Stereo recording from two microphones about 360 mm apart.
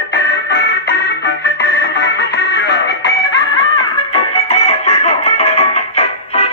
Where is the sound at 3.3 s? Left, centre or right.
Centre.